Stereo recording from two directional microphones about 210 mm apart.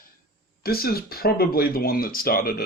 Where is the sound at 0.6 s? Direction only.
45° left (ahead or behind).